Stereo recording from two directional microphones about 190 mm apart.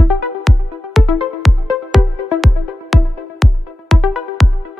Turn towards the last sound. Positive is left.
turn(degrees=0)  # may be behind; listen again after turning